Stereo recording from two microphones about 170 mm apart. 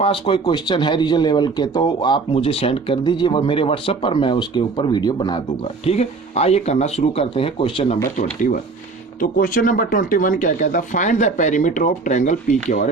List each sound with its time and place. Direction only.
0.0 s speech: 30° left (ahead or behind)
5.6 s speech: 40° left (ahead or behind)
8.1 s speech: 50° left (ahead or behind)